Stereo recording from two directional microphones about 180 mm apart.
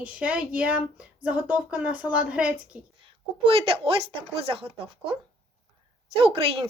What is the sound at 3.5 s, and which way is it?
Speech, 30° right (ahead or behind).